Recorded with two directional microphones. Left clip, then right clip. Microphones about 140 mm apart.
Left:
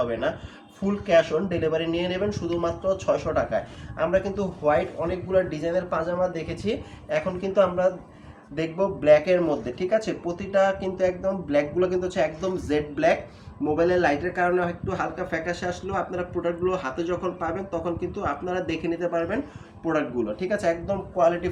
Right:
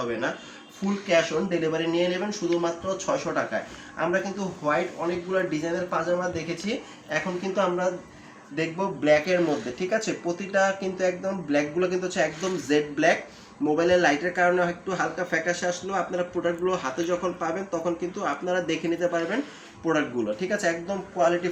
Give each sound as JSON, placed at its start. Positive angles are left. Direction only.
{"t": 1.0, "sound": "a man's voice", "side_deg": 40}